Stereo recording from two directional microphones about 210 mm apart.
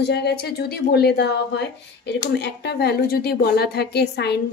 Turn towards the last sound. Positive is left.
turn(degrees=55)  # may be behind; listen again after turning